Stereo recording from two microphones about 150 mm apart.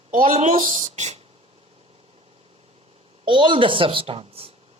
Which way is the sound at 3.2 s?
35° right (ahead or behind).